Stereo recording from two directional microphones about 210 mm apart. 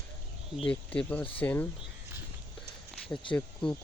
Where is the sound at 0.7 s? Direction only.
5° left (ahead or behind).